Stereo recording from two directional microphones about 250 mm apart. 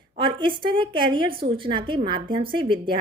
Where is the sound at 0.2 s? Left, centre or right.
Centre.